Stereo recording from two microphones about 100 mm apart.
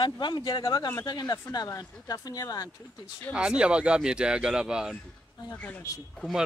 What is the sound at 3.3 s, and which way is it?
Speech, 10° right (ahead or behind).